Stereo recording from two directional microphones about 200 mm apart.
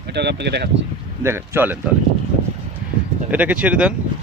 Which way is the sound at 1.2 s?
10° right (ahead or behind).